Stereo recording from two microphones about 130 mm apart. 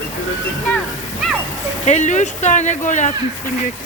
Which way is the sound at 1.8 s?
65° left (ahead or behind).